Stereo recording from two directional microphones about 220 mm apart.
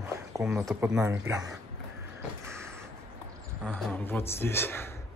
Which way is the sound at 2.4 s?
10° right (ahead or behind).